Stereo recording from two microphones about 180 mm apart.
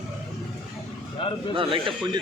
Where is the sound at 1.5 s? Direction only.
30° right (ahead or behind).